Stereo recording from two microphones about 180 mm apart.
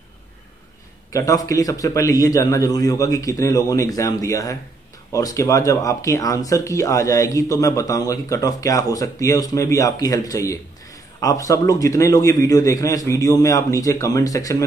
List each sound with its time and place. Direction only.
1.1 s speech: 20° left (ahead or behind)